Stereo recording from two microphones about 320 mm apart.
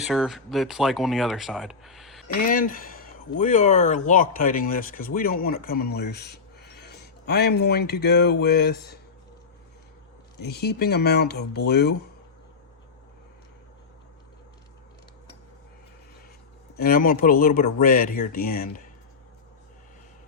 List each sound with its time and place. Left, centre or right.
0.0 s speech: centre
2.2 s speech: left
10.4 s speech: left
16.7 s speech: left